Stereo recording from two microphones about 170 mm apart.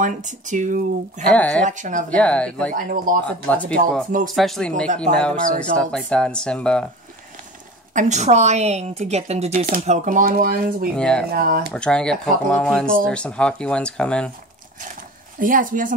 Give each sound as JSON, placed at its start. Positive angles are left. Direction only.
{"t": 0.0, "sound": "speech", "side_deg": -45}
{"t": 1.3, "sound": "speech", "side_deg": 10}
{"t": 1.7, "sound": "speech", "side_deg": -50}
{"t": 2.0, "sound": "speech", "side_deg": 5}
{"t": 2.7, "sound": "speech", "side_deg": -50}
{"t": 3.3, "sound": "speech", "side_deg": 10}
{"t": 5.1, "sound": "speech", "side_deg": -45}
{"t": 5.8, "sound": "speech", "side_deg": 5}
{"t": 7.9, "sound": "a woman's voice", "side_deg": -45}
{"t": 9.8, "sound": "speech", "side_deg": -50}
{"t": 11.0, "sound": "speech", "side_deg": 5}
{"t": 11.3, "sound": "speech", "side_deg": -60}
{"t": 11.7, "sound": "speech", "side_deg": 5}
{"t": 15.3, "sound": "speech", "side_deg": -55}